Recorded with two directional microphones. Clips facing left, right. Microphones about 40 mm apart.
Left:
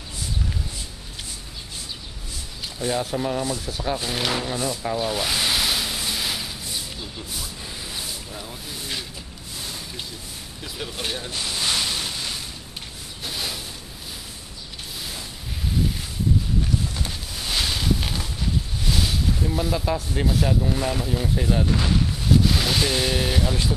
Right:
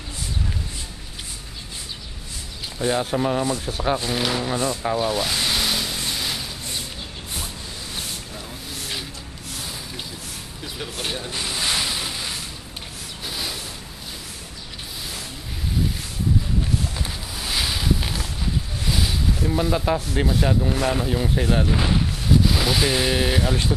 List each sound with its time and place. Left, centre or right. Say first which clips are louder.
2.8 s speech: right 3 dB; right
3.4 s rub: right 3 dB; right
4.0 s speech: right 2 dB; centre
4.8 s speech: right 3 dB; centre
5.1 s a sound: even; centre
10.8 s speech: even; centre
11.3 s a sound: right 1 dB; centre
16.9 s a sound: right 1 dB; centre
19.8 s speech: right 2 dB; centre
22.3 s speech: right 1 dB; centre